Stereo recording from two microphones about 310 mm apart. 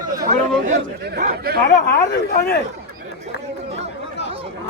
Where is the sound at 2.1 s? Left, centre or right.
Left.